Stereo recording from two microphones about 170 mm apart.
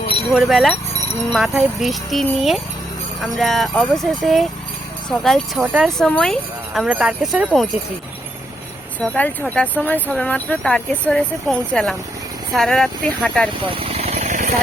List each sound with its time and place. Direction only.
0.3 s speech: centre (ahead or behind)
9.0 s speech: 10° left (ahead or behind)
13.5 s vehicle: 35° right (ahead or behind)